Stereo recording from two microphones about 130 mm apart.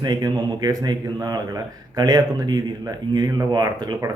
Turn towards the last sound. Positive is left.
turn(degrees=-30)  # may be behind; listen again after turning